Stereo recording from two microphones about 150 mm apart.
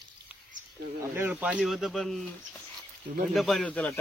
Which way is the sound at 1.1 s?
10° right (ahead or behind).